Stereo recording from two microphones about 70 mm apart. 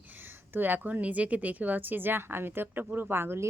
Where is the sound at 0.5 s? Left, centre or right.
Right.